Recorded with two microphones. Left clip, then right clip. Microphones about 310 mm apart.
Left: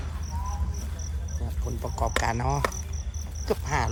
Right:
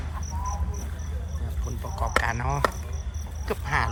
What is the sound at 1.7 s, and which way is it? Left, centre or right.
Cricket, centre.